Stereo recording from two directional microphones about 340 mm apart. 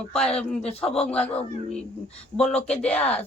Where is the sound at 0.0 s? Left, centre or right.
Centre.